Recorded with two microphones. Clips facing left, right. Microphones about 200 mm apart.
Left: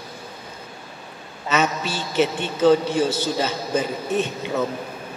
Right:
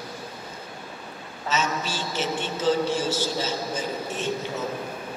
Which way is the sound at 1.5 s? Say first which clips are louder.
Left 5 dB; 60° left (ahead or behind).